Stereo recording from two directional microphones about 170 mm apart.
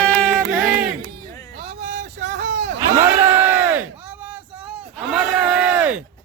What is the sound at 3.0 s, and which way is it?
Crowd, 15° right (ahead or behind).